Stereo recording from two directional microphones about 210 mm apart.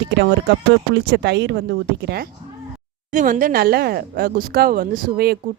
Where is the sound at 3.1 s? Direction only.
40° right (ahead or behind).